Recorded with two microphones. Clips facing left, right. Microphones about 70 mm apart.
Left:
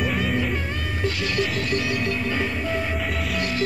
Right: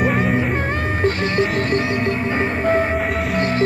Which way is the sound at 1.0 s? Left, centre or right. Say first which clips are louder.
Right 6 dB; right.